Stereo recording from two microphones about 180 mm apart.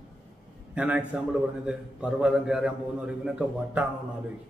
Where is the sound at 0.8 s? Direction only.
10° right (ahead or behind).